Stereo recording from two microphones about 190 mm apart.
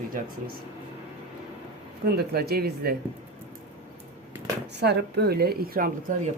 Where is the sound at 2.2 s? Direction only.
55° right (ahead or behind).